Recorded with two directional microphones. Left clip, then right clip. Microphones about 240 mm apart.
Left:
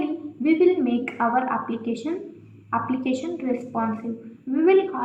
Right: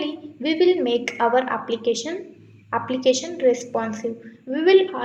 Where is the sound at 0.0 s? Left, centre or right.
Right.